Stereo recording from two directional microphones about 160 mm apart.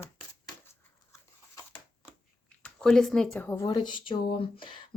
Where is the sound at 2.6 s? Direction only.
5° left (ahead or behind).